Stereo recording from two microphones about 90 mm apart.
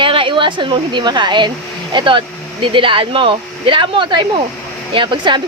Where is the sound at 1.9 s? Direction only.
70° right (ahead or behind).